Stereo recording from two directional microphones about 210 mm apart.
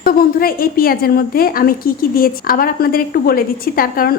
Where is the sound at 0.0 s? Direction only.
45° left (ahead or behind).